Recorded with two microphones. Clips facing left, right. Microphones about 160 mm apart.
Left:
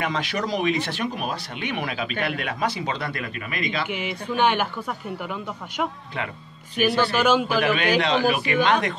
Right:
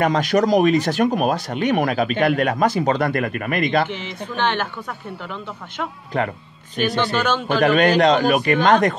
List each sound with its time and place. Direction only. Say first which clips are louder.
0.0 s speech: right 9 dB; 45° right (ahead or behind)
3.9 s speech: left 1 dB; 10° left (ahead or behind)
6.1 s speech: right 10 dB; 45° right (ahead or behind)
7.0 s speech: left 2 dB; 10° left (ahead or behind)
7.6 s speech: right 7 dB; 50° right (ahead or behind)